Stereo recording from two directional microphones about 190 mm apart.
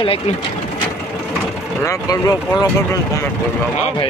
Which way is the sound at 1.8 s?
20° left (ahead or behind).